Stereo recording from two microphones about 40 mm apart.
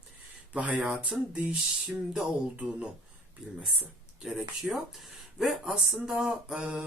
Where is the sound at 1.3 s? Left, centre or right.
Right.